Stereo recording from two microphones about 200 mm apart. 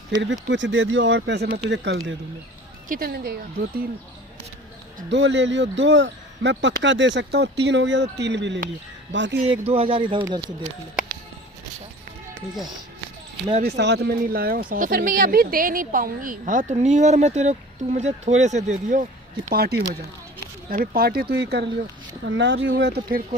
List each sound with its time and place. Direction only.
0.2 s speech: 65° right (ahead or behind)
2.9 s speech: 50° right (ahead or behind)
5.1 s speech: 60° right (ahead or behind)
9.5 s speech: 30° right (ahead or behind)
13.7 s speech: 60° right (ahead or behind); by 19.0 s 40° right (ahead or behind)
19.5 s speech: 50° right (ahead or behind); by 22.7 s 65° right (ahead or behind)
22.8 s speech: 50° right (ahead or behind)